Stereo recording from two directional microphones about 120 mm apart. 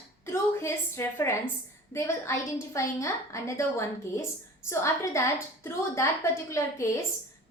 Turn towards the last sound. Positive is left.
turn(degrees=25)  # may be behind; listen again after turning